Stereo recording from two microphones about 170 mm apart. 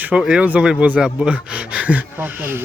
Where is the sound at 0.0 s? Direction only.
5° right (ahead or behind).